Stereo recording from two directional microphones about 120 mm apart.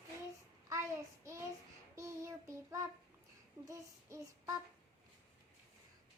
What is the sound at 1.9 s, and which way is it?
Child singing, 25° right (ahead or behind).